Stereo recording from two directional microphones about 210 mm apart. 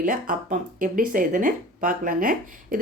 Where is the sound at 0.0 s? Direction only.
40° right (ahead or behind).